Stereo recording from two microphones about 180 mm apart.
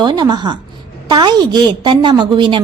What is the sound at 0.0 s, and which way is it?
A woman's voice, 25° right (ahead or behind).